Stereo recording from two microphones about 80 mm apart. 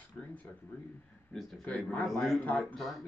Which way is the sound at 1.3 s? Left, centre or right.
Centre.